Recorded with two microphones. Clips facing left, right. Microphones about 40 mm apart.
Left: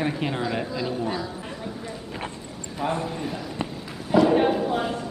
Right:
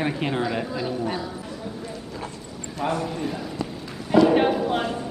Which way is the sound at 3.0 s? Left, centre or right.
Centre.